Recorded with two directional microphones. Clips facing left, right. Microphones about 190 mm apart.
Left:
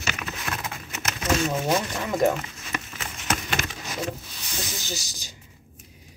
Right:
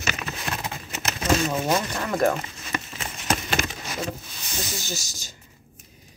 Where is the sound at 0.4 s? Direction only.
30° right (ahead or behind).